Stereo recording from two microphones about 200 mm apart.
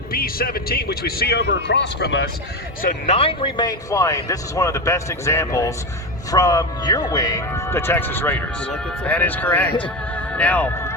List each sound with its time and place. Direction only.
0.1 s speech: 50° left (ahead or behind)
2.8 s speech: 30° left (ahead or behind); by 9.6 s 10° left (ahead or behind)
9.8 s music: 5° left (ahead or behind)